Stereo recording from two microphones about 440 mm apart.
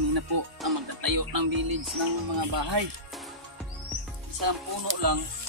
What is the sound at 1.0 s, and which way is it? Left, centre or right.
Speech, right.